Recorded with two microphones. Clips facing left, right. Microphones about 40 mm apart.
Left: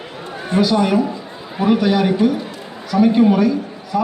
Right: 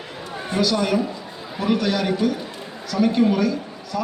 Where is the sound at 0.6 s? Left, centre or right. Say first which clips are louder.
Left 5 dB; centre.